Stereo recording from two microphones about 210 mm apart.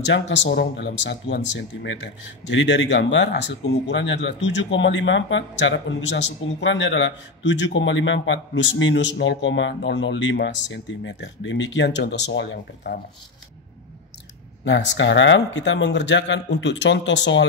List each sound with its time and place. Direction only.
0.0 s speech: 60° left (ahead or behind)
14.6 s speech: 60° left (ahead or behind)